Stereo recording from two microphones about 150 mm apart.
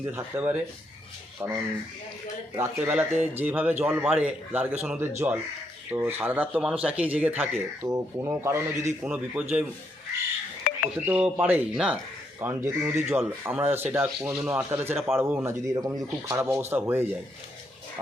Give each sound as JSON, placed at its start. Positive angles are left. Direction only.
{"t": 0.0, "sound": "speech", "side_deg": -10}
{"t": 7.9, "sound": "speech", "side_deg": -20}
{"t": 9.0, "sound": "speech", "side_deg": -5}
{"t": 10.9, "sound": "speech", "side_deg": -10}